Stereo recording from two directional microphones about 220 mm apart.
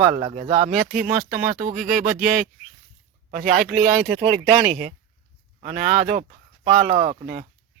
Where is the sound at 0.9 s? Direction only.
40° right (ahead or behind).